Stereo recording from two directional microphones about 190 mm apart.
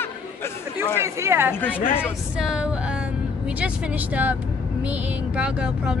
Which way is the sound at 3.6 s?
10° right (ahead or behind).